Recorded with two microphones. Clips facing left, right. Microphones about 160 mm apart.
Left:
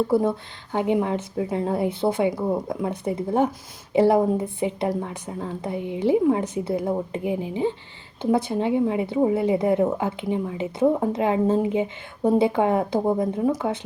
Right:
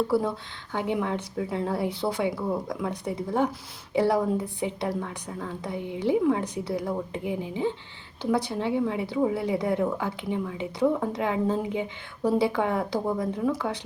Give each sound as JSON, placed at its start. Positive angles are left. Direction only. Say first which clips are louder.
{"t": 0.1, "sound": "a woman's voice", "louder": "left 4 dB", "side_deg": 20}